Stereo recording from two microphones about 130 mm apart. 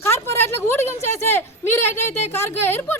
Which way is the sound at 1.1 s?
20° left (ahead or behind).